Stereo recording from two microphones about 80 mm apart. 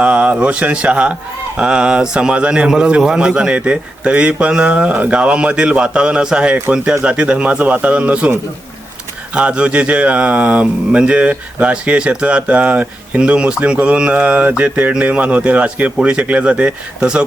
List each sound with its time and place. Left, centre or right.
0.0 s a man's voice: centre
9.3 s a man's voice: centre